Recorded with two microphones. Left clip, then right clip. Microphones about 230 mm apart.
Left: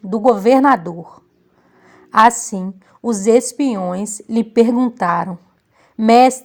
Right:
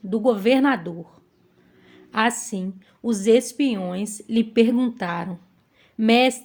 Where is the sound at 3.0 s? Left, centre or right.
Left.